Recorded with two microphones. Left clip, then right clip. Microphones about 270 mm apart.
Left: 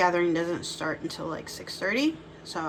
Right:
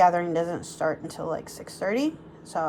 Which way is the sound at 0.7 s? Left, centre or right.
Centre.